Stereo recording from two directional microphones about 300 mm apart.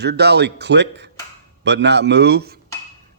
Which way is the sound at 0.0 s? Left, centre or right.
Right.